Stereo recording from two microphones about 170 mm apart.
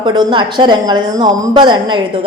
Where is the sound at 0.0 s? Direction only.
25° right (ahead or behind).